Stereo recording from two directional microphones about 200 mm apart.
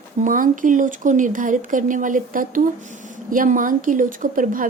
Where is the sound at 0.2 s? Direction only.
40° right (ahead or behind).